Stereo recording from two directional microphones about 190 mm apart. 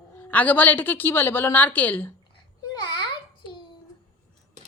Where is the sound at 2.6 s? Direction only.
25° left (ahead or behind).